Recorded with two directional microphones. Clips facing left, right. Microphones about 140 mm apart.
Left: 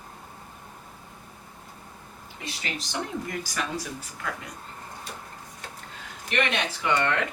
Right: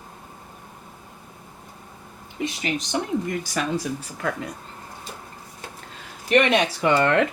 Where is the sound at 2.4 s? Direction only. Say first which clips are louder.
Right 9 dB; 20° right (ahead or behind).